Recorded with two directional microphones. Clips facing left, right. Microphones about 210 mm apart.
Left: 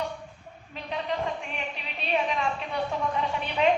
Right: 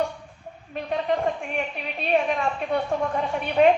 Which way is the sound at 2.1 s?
50° right (ahead or behind).